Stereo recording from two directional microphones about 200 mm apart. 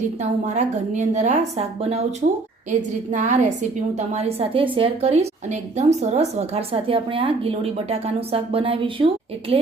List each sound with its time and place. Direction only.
0.2 s a woman's voice: 35° right (ahead or behind)